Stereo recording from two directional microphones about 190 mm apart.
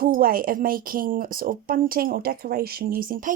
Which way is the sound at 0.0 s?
50° right (ahead or behind).